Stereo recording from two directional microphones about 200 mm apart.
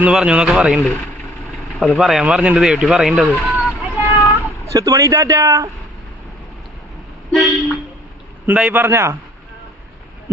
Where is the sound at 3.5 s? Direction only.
5° right (ahead or behind).